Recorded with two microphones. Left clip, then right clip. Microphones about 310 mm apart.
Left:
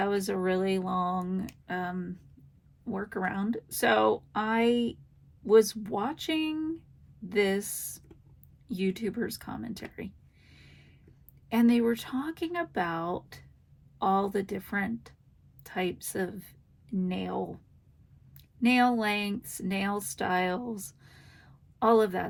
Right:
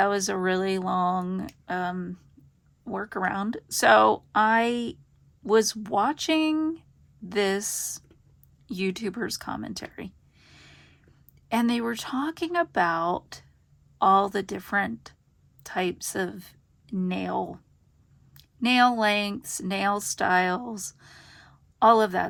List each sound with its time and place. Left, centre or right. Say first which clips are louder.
0.0 s a woman's voice: right 5 dB; right
18.3 s speech: right 4 dB; centre